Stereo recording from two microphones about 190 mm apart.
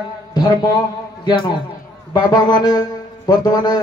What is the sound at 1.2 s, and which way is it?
A man's voice, 20° left (ahead or behind).